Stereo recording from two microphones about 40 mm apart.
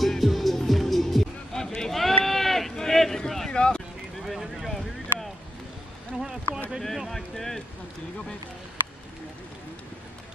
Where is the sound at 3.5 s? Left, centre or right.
Left.